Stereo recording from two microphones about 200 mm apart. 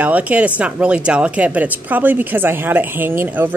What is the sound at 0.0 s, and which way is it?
A woman's voice, 5° right (ahead or behind).